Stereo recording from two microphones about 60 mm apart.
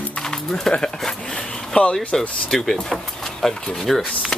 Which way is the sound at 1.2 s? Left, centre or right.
Centre.